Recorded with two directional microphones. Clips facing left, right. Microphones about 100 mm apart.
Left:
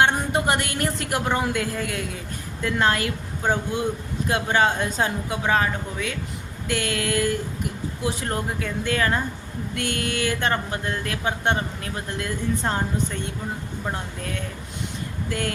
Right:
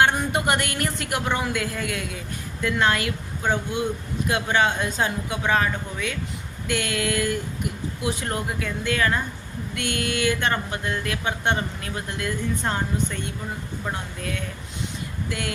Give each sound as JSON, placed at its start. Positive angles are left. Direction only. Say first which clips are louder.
{"t": 0.0, "sound": "speech", "louder": "even", "side_deg": 30}
{"t": 4.3, "sound": "speech", "louder": "left 1 dB", "side_deg": 35}
{"t": 15.3, "sound": "speech", "louder": "left 3 dB", "side_deg": 40}